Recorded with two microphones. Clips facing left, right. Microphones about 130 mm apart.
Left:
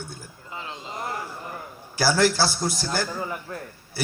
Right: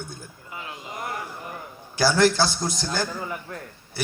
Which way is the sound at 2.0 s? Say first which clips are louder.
Right 1 dB; 20° right (ahead or behind).